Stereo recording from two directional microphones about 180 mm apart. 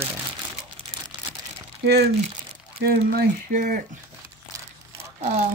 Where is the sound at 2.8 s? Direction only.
60° right (ahead or behind).